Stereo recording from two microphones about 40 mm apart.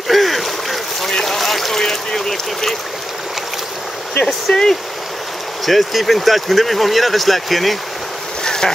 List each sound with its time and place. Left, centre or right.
0.1 s boat: centre
1.2 s a sound: centre
1.8 s speech: centre
4.5 s speech: centre
5.7 s speech: centre
8.5 s boat: centre